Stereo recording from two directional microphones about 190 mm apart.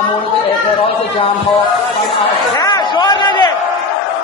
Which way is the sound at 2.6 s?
20° left (ahead or behind).